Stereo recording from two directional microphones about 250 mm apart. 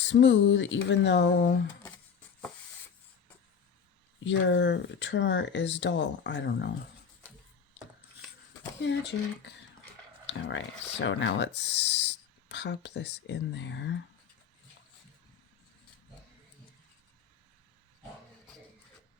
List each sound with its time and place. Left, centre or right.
0.0 s speech: left
4.2 s speech: left
8.8 s speech: left